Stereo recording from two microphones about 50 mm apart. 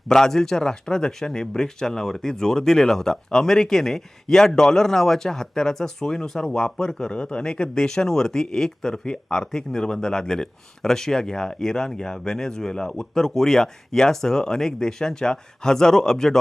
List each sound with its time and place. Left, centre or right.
0.1 s speech: centre